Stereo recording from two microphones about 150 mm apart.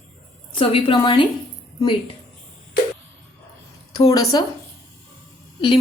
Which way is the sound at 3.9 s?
25° left (ahead or behind).